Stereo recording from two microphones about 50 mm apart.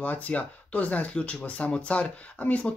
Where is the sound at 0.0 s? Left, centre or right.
Left.